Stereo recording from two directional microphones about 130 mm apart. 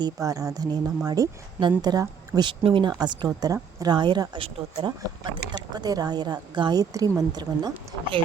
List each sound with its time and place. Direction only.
0.0 s speech: 25° right (ahead or behind); by 4.9 s 45° right (ahead or behind)
4.9 s speech: 35° right (ahead or behind)